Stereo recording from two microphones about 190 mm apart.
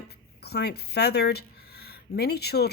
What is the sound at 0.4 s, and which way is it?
Speech, 60° left (ahead or behind).